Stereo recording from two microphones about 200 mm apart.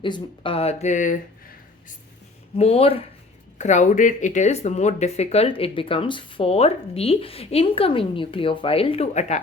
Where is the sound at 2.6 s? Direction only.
30° left (ahead or behind).